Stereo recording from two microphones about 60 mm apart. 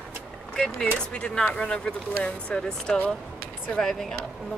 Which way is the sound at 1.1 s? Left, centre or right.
Centre.